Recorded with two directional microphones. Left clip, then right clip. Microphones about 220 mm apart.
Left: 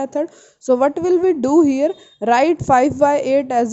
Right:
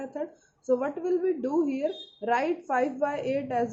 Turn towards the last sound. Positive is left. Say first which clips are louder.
# left 12 dB
turn(degrees=50)  # may be behind; listen again after turning